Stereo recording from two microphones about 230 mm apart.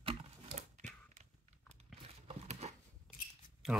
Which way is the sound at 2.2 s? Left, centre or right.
Right.